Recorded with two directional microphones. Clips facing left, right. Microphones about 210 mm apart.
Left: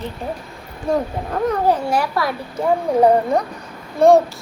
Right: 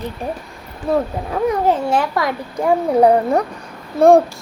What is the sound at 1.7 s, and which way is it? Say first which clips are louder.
Speech: right 1 dB; 20° right (ahead or behind).